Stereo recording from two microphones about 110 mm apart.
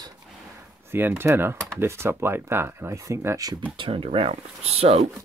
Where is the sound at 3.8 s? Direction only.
55° right (ahead or behind).